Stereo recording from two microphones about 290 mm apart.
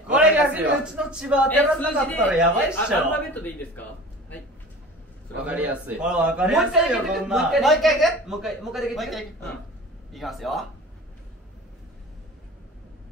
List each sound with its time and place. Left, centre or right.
0.1 s a man's voice: centre
5.4 s a man's voice: centre